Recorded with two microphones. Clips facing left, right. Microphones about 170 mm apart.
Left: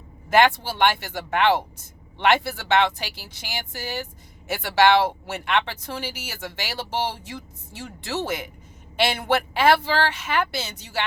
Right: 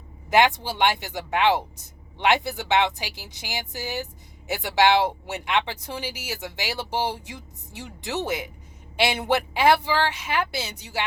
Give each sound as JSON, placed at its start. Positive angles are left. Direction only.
{"t": 0.3, "sound": "speech", "side_deg": -15}